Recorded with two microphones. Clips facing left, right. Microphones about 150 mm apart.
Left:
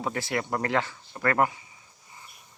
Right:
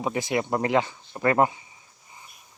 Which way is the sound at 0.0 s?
15° right (ahead or behind).